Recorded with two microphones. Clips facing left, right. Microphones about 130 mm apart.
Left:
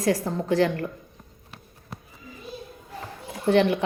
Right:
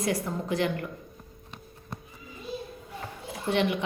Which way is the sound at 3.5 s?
40° left (ahead or behind).